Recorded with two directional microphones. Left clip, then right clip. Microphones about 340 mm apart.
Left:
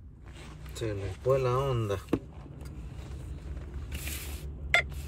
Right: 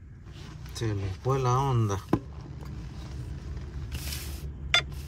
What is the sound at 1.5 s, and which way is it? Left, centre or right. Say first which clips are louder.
Speech: right 2 dB; centre.